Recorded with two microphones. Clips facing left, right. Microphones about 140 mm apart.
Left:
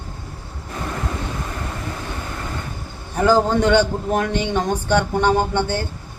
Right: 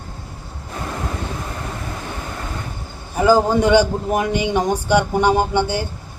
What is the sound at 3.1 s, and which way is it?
A man's voice, 10° right (ahead or behind).